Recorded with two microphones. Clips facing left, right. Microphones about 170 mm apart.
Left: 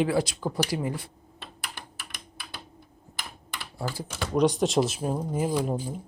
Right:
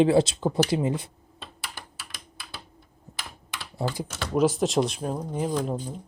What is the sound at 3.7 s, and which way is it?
Speech, 20° right (ahead or behind).